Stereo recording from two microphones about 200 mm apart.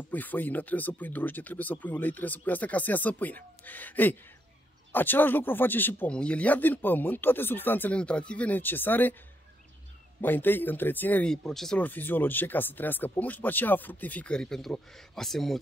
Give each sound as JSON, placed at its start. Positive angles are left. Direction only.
{"t": 0.1, "sound": "speech", "side_deg": 10}
{"t": 10.2, "sound": "speech", "side_deg": 10}